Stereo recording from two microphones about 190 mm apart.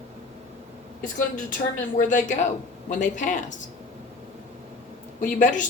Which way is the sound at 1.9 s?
45° left (ahead or behind).